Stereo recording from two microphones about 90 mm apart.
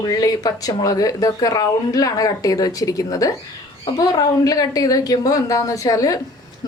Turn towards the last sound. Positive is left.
turn(degrees=40)  # may be behind; listen again after turning